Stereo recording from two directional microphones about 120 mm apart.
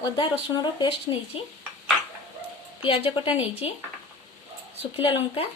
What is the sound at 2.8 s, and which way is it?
Speech, 50° left (ahead or behind).